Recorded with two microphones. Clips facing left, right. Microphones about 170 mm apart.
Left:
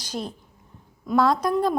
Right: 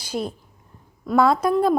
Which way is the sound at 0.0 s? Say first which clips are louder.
Right 4 dB; 10° right (ahead or behind).